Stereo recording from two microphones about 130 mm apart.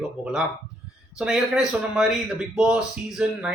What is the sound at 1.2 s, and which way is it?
Speech, 5° right (ahead or behind).